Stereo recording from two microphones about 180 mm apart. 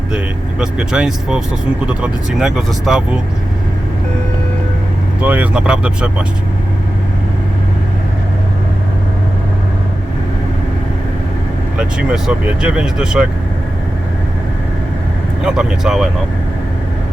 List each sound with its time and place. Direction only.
0.6 s speech: 5° right (ahead or behind)
5.2 s speech: 10° right (ahead or behind)
11.8 s speech: 5° right (ahead or behind)
15.4 s speech: 5° right (ahead or behind)